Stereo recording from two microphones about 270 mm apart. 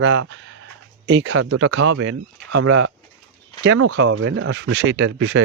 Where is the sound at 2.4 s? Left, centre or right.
Right.